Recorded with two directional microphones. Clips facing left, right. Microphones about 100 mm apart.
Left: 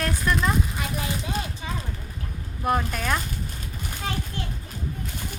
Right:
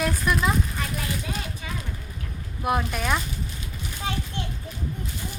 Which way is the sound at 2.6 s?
5° right (ahead or behind).